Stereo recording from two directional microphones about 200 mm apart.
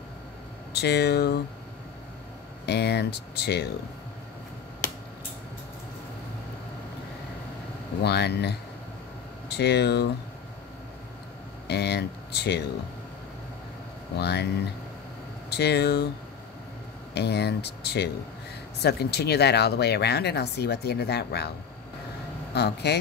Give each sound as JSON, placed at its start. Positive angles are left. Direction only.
{"t": 0.7, "sound": "speech", "side_deg": 55}
{"t": 2.6, "sound": "speech", "side_deg": 55}
{"t": 8.0, "sound": "speech", "side_deg": 55}
{"t": 11.6, "sound": "speech", "side_deg": 55}
{"t": 14.1, "sound": "speech", "side_deg": 55}
{"t": 15.5, "sound": "speech", "side_deg": 55}
{"t": 17.1, "sound": "speech", "side_deg": 55}
{"t": 22.5, "sound": "speech", "side_deg": 55}